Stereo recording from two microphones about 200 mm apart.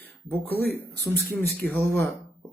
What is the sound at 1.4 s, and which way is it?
Speech, 10° left (ahead or behind).